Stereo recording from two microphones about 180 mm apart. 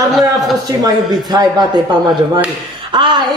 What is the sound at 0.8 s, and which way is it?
Speech, 20° right (ahead or behind).